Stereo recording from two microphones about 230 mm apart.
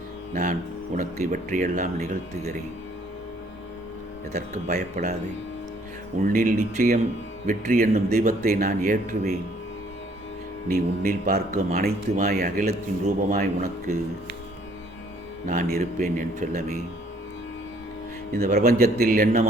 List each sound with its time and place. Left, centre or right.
0.9 s a man's voice: right
4.3 s a man's voice: right
6.3 s a man's voice: right
10.7 s a man's voice: right
15.4 s a man's voice: right
18.4 s a man's voice: right